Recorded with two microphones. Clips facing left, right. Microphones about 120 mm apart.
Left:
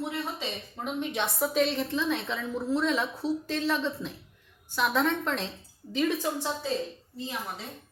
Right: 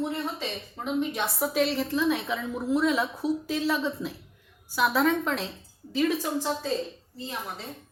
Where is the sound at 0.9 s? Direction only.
5° right (ahead or behind).